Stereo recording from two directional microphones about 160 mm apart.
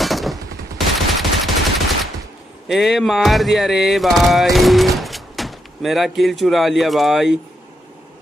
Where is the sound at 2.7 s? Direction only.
Centre (ahead or behind).